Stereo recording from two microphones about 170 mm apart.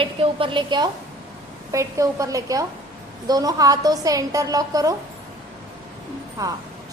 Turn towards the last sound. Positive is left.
turn(degrees=-20)  # may be behind; listen again after turning